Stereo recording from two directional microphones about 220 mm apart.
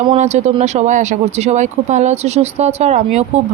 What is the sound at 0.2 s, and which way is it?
Speech, 30° right (ahead or behind).